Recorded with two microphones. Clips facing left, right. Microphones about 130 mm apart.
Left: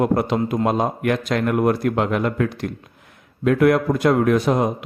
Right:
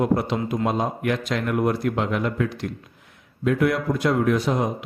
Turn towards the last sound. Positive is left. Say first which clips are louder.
# left 4 dB
turn(degrees=55)  # may be behind; listen again after turning